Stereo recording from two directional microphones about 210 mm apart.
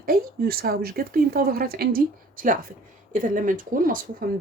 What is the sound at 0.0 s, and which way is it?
Speech, 45° right (ahead or behind).